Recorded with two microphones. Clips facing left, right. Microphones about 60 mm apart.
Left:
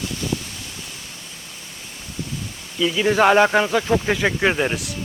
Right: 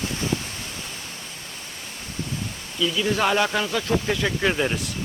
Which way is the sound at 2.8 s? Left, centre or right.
Left.